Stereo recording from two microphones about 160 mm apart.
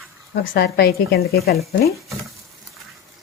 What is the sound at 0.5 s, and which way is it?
Speech, 85° left.